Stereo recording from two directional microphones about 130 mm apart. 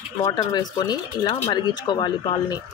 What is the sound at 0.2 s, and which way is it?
Speech, 30° left (ahead or behind).